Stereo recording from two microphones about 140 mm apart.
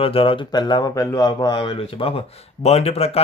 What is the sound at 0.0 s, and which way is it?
Speech, 40° left (ahead or behind).